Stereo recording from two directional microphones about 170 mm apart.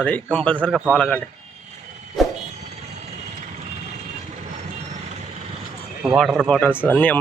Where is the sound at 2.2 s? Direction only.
Centre (ahead or behind).